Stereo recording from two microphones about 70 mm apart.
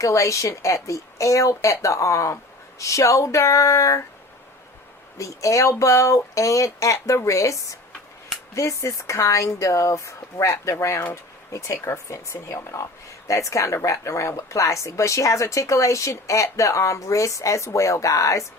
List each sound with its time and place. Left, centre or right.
0.0 s speech: left
5.1 s speech: left